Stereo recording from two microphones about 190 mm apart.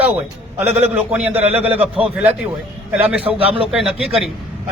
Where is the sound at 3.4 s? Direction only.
30° right (ahead or behind).